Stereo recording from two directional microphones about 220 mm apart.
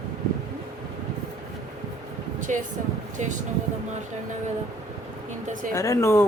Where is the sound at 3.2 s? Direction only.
30° right (ahead or behind).